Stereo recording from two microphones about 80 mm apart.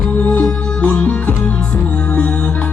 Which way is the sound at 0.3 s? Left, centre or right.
Centre.